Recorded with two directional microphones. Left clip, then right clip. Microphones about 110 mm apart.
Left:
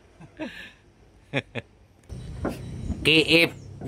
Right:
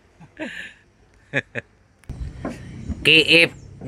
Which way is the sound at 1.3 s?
5° right (ahead or behind).